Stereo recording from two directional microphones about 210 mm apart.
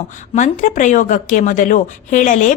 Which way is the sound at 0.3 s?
35° left (ahead or behind).